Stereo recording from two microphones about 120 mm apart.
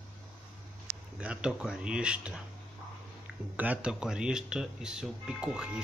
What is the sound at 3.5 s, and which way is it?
Speech, 10° right (ahead or behind).